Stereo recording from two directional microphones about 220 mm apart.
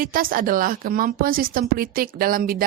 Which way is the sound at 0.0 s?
40° right (ahead or behind).